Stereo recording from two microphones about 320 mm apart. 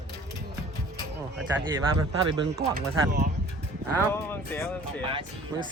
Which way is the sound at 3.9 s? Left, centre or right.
Centre.